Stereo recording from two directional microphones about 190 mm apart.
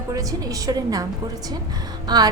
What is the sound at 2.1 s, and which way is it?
Speech, 20° right (ahead or behind).